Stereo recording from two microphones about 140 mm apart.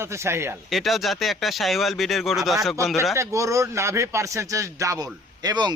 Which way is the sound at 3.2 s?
20° right (ahead or behind).